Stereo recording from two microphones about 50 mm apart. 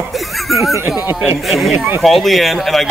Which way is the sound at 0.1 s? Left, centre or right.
Centre.